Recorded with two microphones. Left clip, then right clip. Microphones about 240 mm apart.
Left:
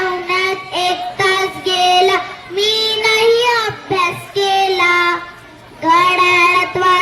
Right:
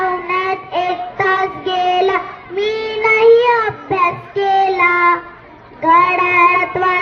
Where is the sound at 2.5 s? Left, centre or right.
Left.